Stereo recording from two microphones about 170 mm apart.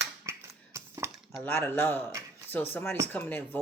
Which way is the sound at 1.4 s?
15° left (ahead or behind).